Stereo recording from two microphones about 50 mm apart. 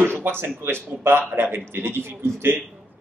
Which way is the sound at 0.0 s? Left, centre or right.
Right.